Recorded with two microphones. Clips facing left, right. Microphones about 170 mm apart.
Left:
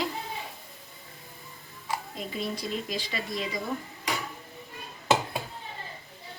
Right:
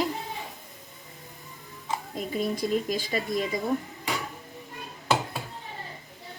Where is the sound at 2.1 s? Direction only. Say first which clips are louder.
Right 5 dB; 50° right (ahead or behind).